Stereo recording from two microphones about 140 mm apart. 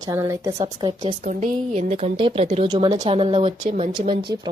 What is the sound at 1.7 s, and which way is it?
A woman's voice, 45° right (ahead or behind).